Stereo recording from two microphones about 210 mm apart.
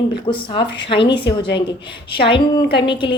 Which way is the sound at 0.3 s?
20° left (ahead or behind).